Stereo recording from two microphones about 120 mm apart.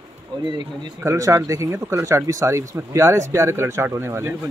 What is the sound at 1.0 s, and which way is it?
Speech, 25° right (ahead or behind).